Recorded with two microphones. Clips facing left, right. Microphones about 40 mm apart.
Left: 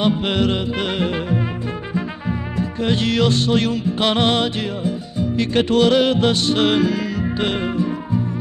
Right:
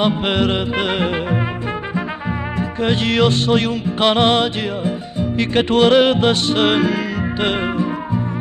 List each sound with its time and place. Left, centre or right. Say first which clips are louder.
0.0 s music: right 1 dB; right
2.8 s music: right 2 dB; right